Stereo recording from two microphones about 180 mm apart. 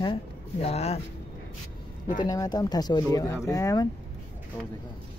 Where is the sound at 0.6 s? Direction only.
35° left (ahead or behind).